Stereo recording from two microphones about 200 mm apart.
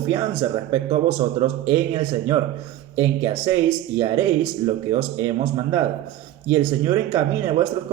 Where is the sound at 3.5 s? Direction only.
10° right (ahead or behind).